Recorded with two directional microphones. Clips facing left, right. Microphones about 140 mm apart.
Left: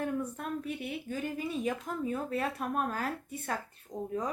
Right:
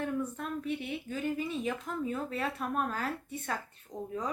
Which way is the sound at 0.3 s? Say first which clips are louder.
Right 1 dB; 40° left (ahead or behind).